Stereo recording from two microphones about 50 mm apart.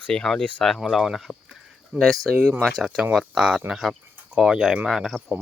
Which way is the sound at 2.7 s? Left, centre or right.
Centre.